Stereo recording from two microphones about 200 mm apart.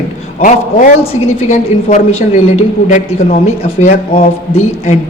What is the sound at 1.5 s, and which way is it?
A man's voice, 35° left (ahead or behind).